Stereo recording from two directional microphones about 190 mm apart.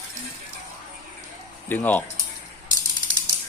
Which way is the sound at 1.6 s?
10° left (ahead or behind).